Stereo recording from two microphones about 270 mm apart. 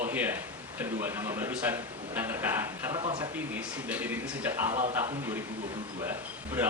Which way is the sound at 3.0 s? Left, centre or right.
Centre.